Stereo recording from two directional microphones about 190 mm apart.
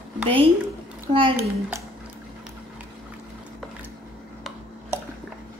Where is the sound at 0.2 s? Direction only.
30° right (ahead or behind).